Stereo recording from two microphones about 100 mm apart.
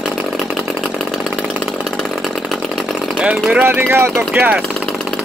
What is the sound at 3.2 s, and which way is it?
Vehicle, 10° right (ahead or behind).